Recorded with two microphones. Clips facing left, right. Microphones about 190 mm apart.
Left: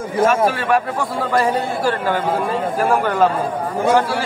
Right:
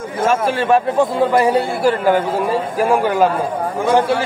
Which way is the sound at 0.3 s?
25° right (ahead or behind).